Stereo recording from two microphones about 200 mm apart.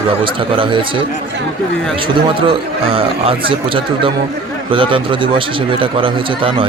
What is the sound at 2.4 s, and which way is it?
Speech, 30° right (ahead or behind).